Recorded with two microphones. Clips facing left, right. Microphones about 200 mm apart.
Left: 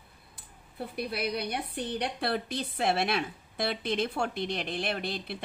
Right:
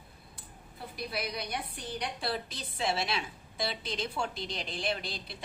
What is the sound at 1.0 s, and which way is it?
A woman's voice, 60° left (ahead or behind).